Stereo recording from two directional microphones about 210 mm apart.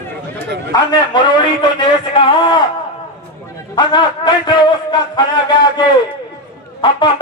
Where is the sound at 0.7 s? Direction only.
20° left (ahead or behind).